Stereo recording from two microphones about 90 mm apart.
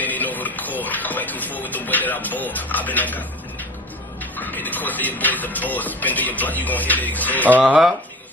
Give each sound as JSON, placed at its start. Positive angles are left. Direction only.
{"t": 0.0, "sound": "music", "side_deg": 20}
{"t": 4.4, "sound": "speech", "side_deg": 20}
{"t": 7.6, "sound": "speech", "side_deg": -5}